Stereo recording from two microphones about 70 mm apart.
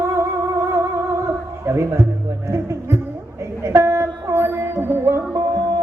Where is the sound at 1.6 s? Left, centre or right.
Right.